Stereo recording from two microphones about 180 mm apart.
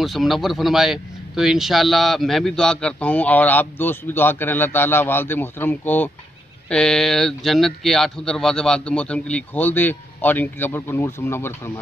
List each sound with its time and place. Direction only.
0.0 s speech: centre (ahead or behind)